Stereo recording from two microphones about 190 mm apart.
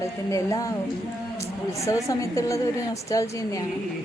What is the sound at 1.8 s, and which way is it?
A woman's voice, 15° left (ahead or behind).